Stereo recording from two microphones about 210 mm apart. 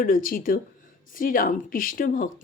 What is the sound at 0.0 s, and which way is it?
Speech, 40° left (ahead or behind).